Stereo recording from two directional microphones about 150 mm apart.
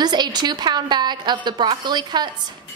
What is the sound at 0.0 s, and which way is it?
A woman's voice, 30° right (ahead or behind).